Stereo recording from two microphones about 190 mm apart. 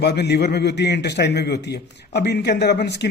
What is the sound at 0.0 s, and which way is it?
A man's voice, 60° left (ahead or behind).